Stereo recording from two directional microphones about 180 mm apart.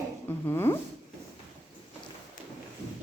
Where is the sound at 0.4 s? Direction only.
15° left (ahead or behind).